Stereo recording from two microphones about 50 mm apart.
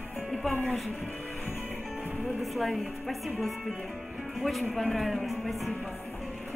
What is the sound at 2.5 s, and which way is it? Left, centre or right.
A woman's voice, centre.